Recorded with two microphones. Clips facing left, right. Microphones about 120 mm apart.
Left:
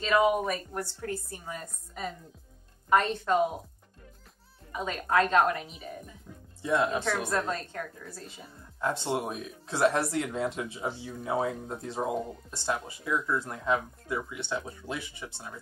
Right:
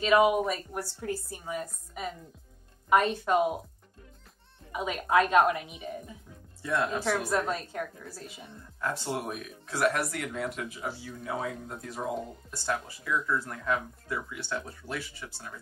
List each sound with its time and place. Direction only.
0.0 s a woman's voice: 10° right (ahead or behind)
4.7 s a woman's voice: 10° right (ahead or behind)
6.6 s speech: 20° left (ahead or behind)
7.1 s a woman's voice: 10° right (ahead or behind)
8.8 s speech: 25° left (ahead or behind)